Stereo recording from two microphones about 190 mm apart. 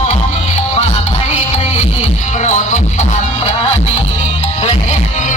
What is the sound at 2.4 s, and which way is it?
Music, 40° left (ahead or behind).